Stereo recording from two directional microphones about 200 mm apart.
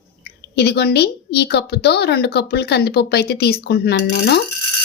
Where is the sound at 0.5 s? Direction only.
55° left (ahead or behind).